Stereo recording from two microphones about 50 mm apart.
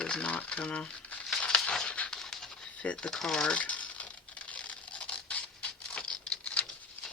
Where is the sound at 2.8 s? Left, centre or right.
Left.